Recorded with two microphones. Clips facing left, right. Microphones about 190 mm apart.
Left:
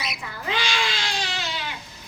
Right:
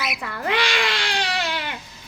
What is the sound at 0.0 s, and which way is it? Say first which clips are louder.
Baby cry: right 5 dB; 60° right (ahead or behind).